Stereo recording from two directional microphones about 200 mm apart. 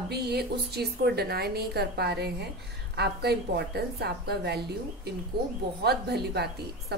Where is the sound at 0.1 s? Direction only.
55° right (ahead or behind).